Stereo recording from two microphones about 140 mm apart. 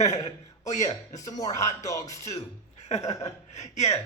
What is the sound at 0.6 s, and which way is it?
Speech, 55° left (ahead or behind).